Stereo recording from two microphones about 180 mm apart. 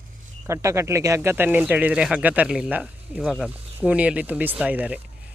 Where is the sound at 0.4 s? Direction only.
15° right (ahead or behind).